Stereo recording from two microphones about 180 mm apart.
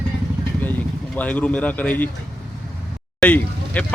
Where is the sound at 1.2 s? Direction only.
10° left (ahead or behind).